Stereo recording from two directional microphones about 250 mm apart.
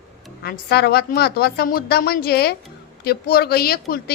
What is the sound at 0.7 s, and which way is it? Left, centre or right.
Speech, left.